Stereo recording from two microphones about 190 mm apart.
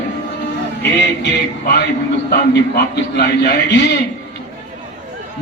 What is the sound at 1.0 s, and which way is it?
A man's voice, 60° left (ahead or behind).